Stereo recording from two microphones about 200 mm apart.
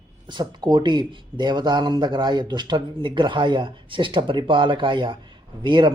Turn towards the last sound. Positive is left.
turn(degrees=-25)  # may be behind; listen again after turning